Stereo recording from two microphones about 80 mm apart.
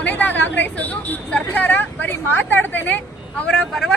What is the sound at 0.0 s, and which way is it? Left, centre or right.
Speech, left.